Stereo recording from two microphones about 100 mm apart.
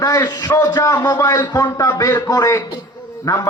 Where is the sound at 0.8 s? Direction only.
25° left (ahead or behind).